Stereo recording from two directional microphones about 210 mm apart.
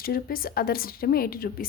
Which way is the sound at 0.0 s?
45° left (ahead or behind).